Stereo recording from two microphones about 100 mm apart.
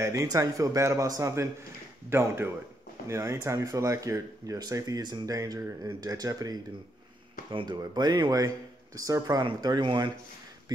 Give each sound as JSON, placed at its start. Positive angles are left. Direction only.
{"t": 0.0, "sound": "speech", "side_deg": -30}